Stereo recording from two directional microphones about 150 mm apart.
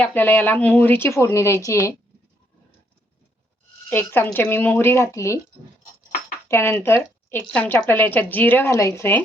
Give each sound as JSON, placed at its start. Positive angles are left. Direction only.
{"t": 0.0, "sound": "speech", "side_deg": 10}
{"t": 3.8, "sound": "speech", "side_deg": 10}
{"t": 6.5, "sound": "speech", "side_deg": 15}